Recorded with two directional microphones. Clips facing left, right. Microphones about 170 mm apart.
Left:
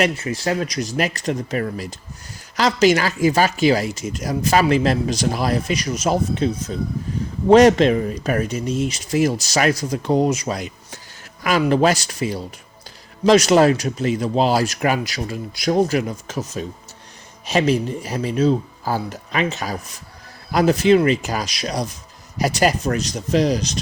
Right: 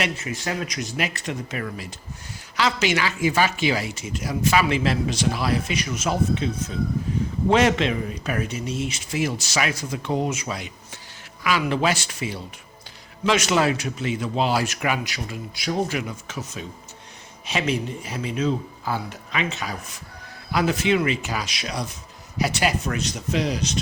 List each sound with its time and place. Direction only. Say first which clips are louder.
0.0 s speech: left 7 dB; 35° left (ahead or behind)